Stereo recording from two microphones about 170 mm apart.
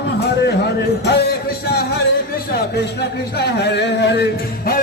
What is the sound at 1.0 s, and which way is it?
Music, 70° left (ahead or behind).